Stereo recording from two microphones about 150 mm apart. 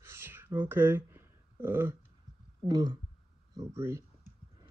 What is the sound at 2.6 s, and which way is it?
Speech, 25° right (ahead or behind).